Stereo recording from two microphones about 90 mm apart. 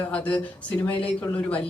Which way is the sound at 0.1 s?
15° left (ahead or behind).